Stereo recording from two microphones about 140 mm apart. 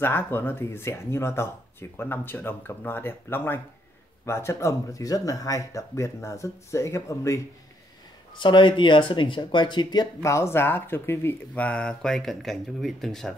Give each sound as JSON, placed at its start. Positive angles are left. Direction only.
{"t": 0.0, "sound": "speech", "side_deg": 15}
{"t": 8.4, "sound": "speech", "side_deg": 35}